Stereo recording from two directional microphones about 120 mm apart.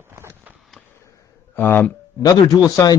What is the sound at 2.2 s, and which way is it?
Speech, 30° left (ahead or behind).